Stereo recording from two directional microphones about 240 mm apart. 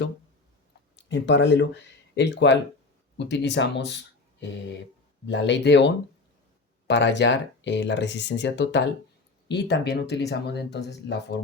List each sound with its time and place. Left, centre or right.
0.9 s speech: left